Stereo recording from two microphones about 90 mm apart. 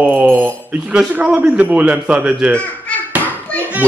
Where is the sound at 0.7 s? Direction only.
10° right (ahead or behind).